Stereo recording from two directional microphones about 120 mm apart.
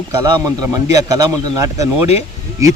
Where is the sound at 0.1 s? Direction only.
30° right (ahead or behind).